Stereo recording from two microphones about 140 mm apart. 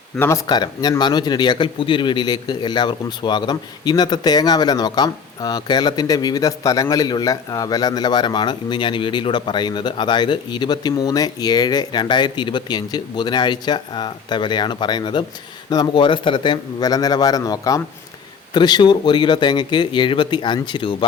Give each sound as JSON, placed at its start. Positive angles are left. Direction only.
{"t": 0.2, "sound": "a man's voice", "side_deg": 20}